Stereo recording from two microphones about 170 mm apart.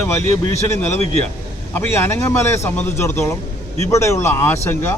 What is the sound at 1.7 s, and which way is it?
Speech, 15° left (ahead or behind).